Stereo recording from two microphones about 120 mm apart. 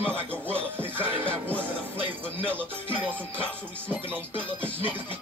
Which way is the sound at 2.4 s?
10° left (ahead or behind).